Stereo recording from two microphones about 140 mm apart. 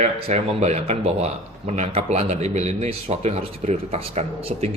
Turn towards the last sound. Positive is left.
turn(degrees=-45)  # may be behind; listen again after turning